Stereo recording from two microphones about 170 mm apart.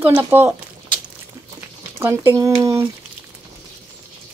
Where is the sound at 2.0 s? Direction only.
15° right (ahead or behind).